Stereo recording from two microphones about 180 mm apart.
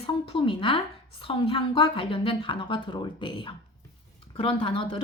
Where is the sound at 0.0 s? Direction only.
30° left (ahead or behind).